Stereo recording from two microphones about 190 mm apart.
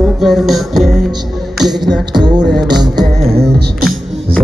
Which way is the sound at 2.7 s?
60° right (ahead or behind).